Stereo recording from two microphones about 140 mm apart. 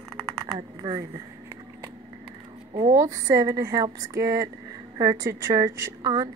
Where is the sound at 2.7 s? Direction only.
25° right (ahead or behind).